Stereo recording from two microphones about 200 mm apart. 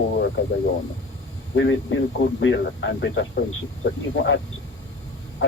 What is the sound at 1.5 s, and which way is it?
Speech, 70° left (ahead or behind).